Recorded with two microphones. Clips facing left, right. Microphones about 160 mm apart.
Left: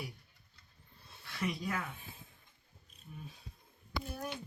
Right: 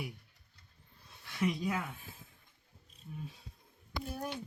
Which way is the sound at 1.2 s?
15° right (ahead or behind).